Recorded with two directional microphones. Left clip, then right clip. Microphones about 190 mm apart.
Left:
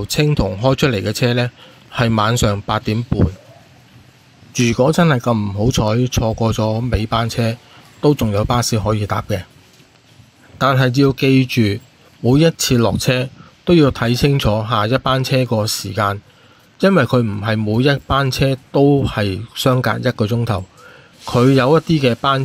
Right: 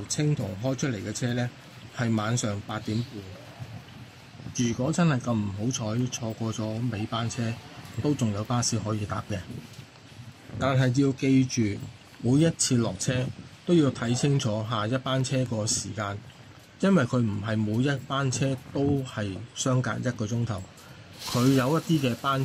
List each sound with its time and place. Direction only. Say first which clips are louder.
0.1 s a man's voice: left 13 dB; 45° left (ahead or behind)
4.6 s speech: left 14 dB; 40° left (ahead or behind)
10.6 s speech: left 11 dB; 35° left (ahead or behind)